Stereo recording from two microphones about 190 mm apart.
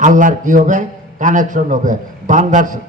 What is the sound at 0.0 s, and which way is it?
A man's voice, 45° right (ahead or behind).